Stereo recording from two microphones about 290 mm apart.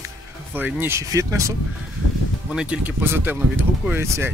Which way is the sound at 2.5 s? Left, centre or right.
Centre.